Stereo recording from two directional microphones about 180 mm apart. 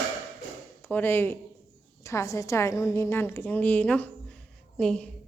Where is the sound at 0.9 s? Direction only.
10° left (ahead or behind).